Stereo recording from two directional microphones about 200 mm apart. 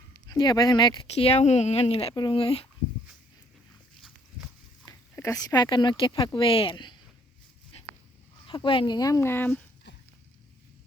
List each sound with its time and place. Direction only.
0.3 s speech: 20° left (ahead or behind)
4.9 s speech: 15° left (ahead or behind)
8.4 s speech: 25° left (ahead or behind); by 9.6 s 10° left (ahead or behind)